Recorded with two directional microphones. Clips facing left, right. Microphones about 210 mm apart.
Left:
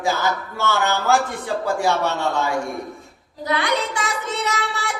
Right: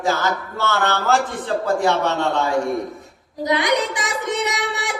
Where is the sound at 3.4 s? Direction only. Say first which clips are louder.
Right 3 dB; 15° right (ahead or behind).